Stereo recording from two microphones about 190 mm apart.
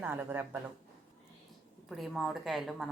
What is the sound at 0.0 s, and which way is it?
Speech, 10° right (ahead or behind).